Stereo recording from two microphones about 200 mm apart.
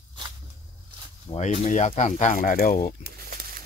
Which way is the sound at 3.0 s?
50° right (ahead or behind).